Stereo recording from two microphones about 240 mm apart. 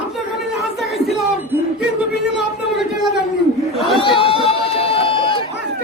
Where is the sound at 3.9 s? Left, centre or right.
Left.